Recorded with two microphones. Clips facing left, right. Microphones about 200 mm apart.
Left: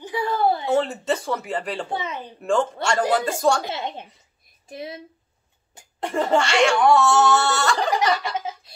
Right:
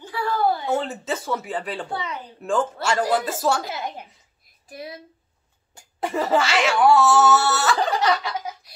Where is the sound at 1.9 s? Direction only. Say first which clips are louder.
Left 2 dB; 25° left (ahead or behind).